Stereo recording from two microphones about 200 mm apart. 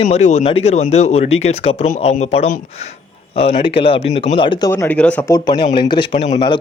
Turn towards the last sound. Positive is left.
turn(degrees=25)  # may be behind; listen again after turning